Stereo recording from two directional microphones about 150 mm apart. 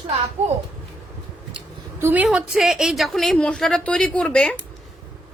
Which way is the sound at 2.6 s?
5° right (ahead or behind).